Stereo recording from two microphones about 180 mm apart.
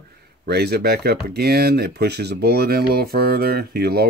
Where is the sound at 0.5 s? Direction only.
65° right (ahead or behind).